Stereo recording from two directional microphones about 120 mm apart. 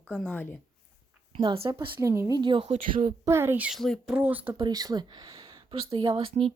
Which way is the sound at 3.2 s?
20° right (ahead or behind).